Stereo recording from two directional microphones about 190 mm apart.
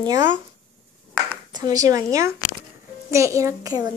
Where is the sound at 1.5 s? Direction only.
20° right (ahead or behind).